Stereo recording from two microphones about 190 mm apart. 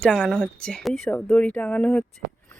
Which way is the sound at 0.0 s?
5° left (ahead or behind).